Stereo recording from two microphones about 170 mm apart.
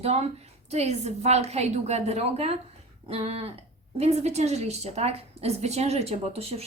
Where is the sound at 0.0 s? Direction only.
35° right (ahead or behind).